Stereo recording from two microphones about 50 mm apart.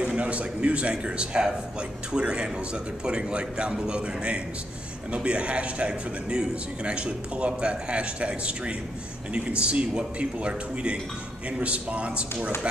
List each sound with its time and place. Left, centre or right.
0.2 s a man's voice: right